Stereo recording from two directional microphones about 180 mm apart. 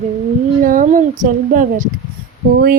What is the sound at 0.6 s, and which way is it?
Speech, 50° right (ahead or behind).